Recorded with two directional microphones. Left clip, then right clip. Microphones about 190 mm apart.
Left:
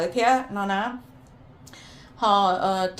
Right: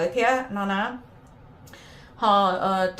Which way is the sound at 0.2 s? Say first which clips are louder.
Left 4 dB; 35° left (ahead or behind).